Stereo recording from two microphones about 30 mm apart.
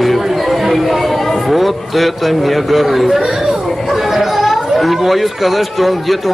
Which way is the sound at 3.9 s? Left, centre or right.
Centre.